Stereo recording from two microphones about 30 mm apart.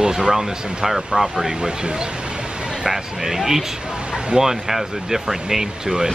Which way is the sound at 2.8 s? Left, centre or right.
Centre.